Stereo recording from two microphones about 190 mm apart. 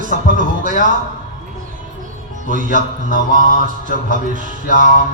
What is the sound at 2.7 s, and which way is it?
Mantra, 45° right (ahead or behind).